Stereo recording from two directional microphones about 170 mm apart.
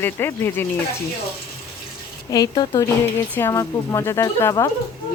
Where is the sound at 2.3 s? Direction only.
25° left (ahead or behind).